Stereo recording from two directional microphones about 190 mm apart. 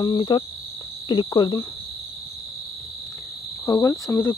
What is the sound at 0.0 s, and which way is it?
Cricket, 20° left (ahead or behind).